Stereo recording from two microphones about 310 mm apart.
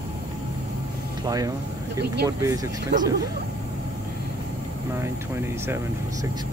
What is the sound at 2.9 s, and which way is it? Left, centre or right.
Speech, right.